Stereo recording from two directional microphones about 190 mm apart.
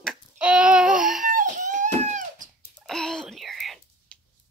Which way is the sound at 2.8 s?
5° left (ahead or behind).